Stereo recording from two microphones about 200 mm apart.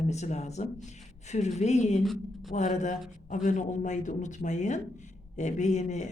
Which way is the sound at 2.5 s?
35° left (ahead or behind).